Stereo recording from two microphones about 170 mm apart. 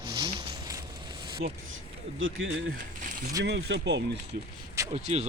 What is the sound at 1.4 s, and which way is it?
Speech, 60° right (ahead or behind).